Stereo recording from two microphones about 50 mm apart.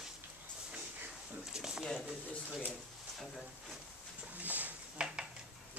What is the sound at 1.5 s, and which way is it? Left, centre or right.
Speech, centre.